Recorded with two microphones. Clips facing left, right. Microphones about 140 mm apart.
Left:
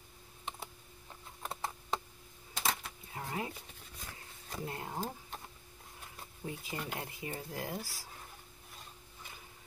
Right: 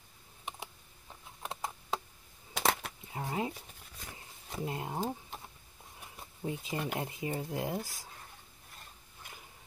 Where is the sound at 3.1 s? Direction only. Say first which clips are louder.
Right 4 dB; 25° right (ahead or behind).